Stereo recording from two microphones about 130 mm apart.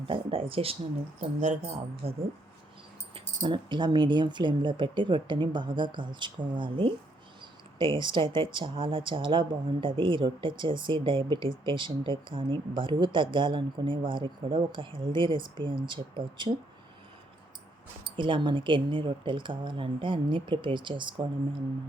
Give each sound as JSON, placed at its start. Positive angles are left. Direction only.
{"t": 0.0, "sound": "speech", "side_deg": -45}
{"t": 1.4, "sound": "speech", "side_deg": -60}
{"t": 3.2, "sound": "speech", "side_deg": -35}
{"t": 18.2, "sound": "speech", "side_deg": -40}